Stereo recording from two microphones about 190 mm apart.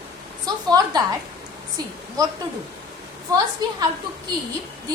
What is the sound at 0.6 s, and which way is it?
Speech, 20° right (ahead or behind).